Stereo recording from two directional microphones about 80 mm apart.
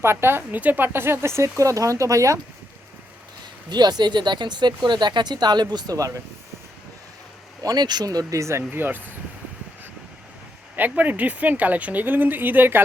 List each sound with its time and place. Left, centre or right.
0.0 s speech: right
3.7 s speech: right
7.6 s speech: right
8.3 s speech: right
10.8 s speech: right